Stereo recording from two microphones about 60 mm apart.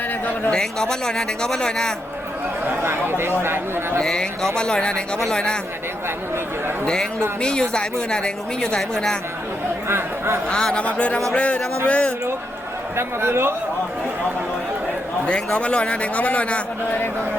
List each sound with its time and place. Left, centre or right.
0.5 s speech: centre
2.6 s chatter: right
3.4 s speech: right
4.0 s speech: centre
6.8 s speech: centre
9.9 s speech: right
10.5 s a man's voice: centre
13.0 s speech: right
15.5 s a man's voice: centre